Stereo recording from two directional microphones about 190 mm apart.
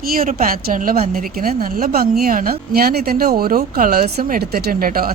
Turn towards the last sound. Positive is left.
turn(degrees=-50)  # may be behind; listen again after turning